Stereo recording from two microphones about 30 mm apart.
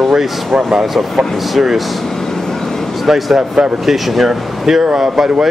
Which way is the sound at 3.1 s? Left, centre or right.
Centre.